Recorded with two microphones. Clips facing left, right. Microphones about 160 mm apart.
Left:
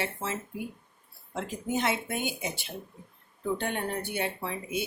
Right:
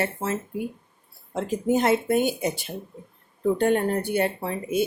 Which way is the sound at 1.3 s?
40° right (ahead or behind).